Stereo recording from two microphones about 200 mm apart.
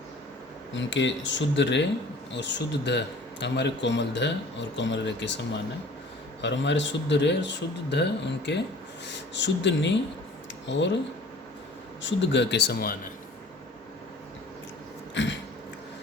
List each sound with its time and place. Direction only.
0.8 s speech: 65° left (ahead or behind)
6.4 s speech: 65° left (ahead or behind)
12.0 s speech: 60° left (ahead or behind)
15.1 s throat clearing: 65° left (ahead or behind)